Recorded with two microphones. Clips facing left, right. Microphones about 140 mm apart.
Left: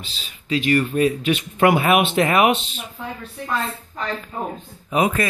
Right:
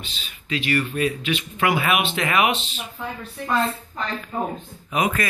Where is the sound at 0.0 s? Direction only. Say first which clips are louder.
Even; 35° left (ahead or behind).